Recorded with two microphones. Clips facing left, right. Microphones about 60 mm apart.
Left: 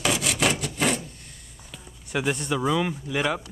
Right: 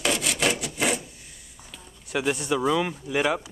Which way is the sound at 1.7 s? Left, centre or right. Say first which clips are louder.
Even; centre.